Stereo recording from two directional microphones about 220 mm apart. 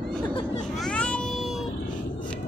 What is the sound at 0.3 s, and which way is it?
Vehicle, 25° left (ahead or behind).